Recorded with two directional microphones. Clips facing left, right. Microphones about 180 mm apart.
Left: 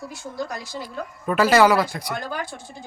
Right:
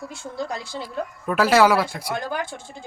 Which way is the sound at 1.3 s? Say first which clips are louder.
Left 1 dB; centre (ahead or behind).